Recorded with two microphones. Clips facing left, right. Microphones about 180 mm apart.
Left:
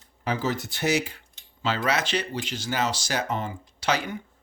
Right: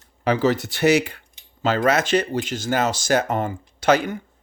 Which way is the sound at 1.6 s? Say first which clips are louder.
Right 7 dB; 50° right (ahead or behind).